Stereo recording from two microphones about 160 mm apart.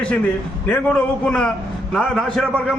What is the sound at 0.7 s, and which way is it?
A man's voice, 5° left (ahead or behind).